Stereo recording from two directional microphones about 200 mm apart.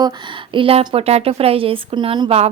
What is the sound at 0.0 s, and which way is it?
Speech, 25° right (ahead or behind).